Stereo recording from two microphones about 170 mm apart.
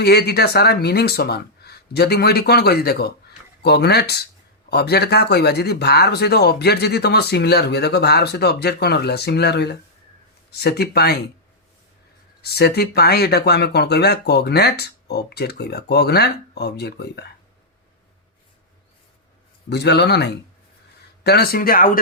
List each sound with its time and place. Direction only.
0.0 s speech: 70° left (ahead or behind)
12.4 s speech: 70° left (ahead or behind)
19.7 s speech: 75° left (ahead or behind)
21.2 s speech: 65° left (ahead or behind)